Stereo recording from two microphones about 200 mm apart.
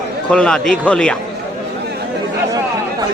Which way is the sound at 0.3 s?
5° left (ahead or behind).